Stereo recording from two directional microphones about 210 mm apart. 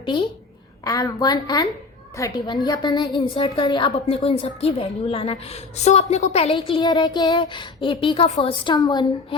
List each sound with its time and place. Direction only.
0.1 s a woman's voice: 20° left (ahead or behind)